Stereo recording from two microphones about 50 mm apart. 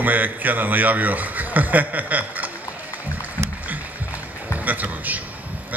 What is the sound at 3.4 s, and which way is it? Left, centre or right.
Rowboat, right.